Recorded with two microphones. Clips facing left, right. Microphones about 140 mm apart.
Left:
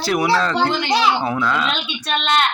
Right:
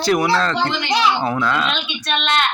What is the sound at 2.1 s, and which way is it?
Speech, 40° left (ahead or behind).